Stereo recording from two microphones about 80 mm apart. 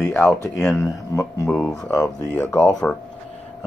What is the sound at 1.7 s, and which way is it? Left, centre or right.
Speech, centre.